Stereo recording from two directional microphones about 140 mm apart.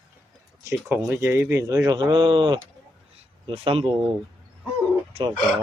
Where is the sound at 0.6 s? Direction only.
15° right (ahead or behind); by 3.8 s 40° right (ahead or behind).